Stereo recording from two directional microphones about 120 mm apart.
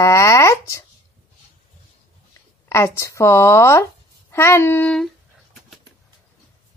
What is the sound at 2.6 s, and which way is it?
Speech, 25° left (ahead or behind).